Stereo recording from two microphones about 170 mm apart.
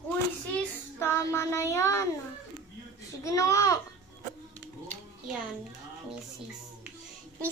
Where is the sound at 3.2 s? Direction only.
20° left (ahead or behind).